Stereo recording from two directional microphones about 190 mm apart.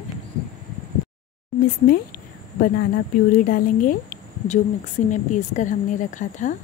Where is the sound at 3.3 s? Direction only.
45° left (ahead or behind).